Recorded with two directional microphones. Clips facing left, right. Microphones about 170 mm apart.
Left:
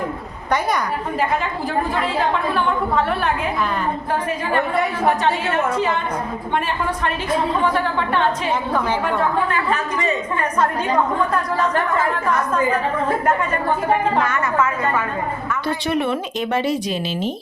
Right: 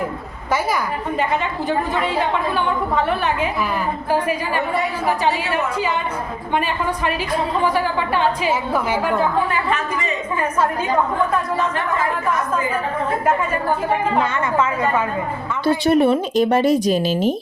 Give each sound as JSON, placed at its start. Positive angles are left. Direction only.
{"t": 2.9, "sound": "a woman's voice", "side_deg": 0}
{"t": 5.0, "sound": "a woman's voice", "side_deg": -5}
{"t": 7.6, "sound": "a woman's voice", "side_deg": -5}
{"t": 15.6, "sound": "speech", "side_deg": -30}